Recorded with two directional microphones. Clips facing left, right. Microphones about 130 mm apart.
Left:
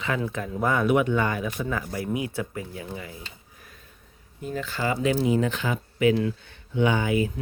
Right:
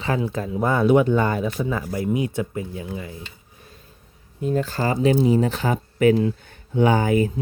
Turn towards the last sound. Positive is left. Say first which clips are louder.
# right 5 dB
turn(degrees=-40)  # may be behind; listen again after turning